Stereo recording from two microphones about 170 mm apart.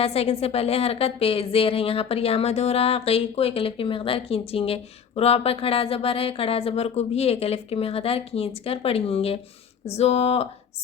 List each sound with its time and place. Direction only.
0.0 s a woman's voice: 35° left (ahead or behind)